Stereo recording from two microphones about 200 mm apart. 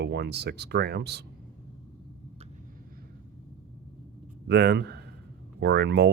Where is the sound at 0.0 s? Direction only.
55° right (ahead or behind).